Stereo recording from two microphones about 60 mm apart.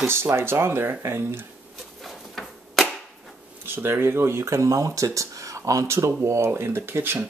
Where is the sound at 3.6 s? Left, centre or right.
Right.